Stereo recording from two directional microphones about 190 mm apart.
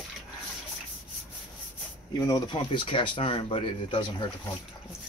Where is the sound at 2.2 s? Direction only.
20° left (ahead or behind).